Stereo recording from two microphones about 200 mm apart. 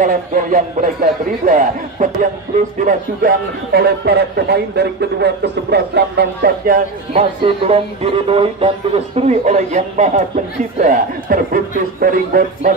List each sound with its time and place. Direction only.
0.0 s a man's voice: 40° right (ahead or behind)
7.2 s a man's voice: 30° right (ahead or behind)